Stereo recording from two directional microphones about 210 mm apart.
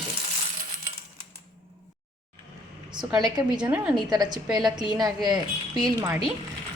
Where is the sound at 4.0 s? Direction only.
20° right (ahead or behind).